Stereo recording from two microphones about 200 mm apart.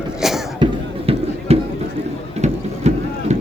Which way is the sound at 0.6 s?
20° right (ahead or behind).